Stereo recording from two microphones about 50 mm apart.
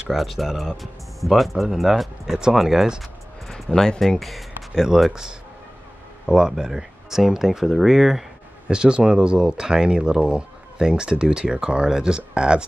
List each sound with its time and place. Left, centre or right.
0.1 s speech: centre
4.8 s speech: centre
8.6 s speech: centre